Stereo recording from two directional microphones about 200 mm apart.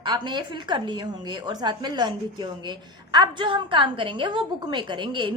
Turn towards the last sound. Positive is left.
turn(degrees=-25)  # may be behind; listen again after turning